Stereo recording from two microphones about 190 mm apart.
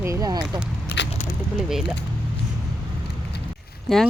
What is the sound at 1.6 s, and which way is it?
Speech, centre (ahead or behind).